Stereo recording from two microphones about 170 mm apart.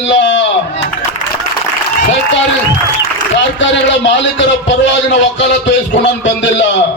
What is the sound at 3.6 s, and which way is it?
A man's voice, 90° left.